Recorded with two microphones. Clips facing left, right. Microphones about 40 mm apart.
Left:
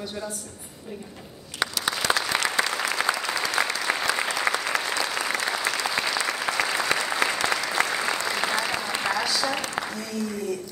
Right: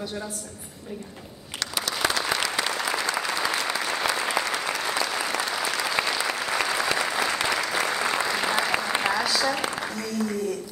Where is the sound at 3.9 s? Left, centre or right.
Left.